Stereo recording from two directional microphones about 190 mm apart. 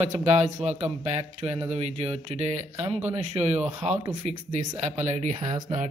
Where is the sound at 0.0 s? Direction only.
35° right (ahead or behind).